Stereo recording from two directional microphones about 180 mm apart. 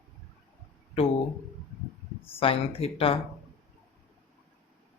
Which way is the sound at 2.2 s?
30° left (ahead or behind).